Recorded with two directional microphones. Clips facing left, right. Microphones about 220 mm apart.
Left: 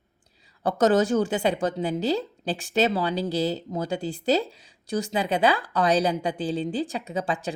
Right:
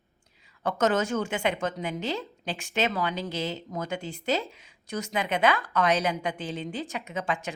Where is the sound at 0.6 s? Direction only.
35° left (ahead or behind).